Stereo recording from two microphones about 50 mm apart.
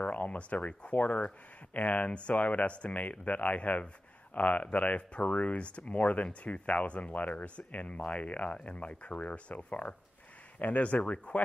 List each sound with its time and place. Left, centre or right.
0.0 s speech: left